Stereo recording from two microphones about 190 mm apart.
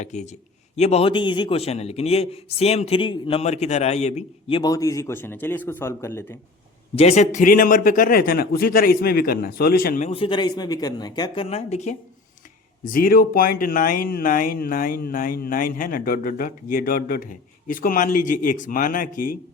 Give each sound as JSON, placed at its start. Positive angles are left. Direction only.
{"t": 0.0, "sound": "a man's voice", "side_deg": 40}
{"t": 6.9, "sound": "speech", "side_deg": 35}
{"t": 11.4, "sound": "speech", "side_deg": 35}
{"t": 12.8, "sound": "speech", "side_deg": 45}